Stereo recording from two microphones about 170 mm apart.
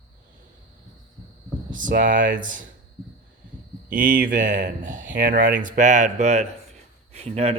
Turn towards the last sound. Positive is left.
turn(degrees=-35)  # may be behind; listen again after turning